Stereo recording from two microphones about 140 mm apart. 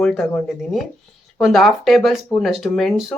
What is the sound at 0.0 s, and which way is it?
Speech, centre (ahead or behind).